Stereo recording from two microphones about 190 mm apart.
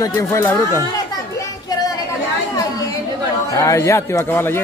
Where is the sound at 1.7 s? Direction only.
20° left (ahead or behind).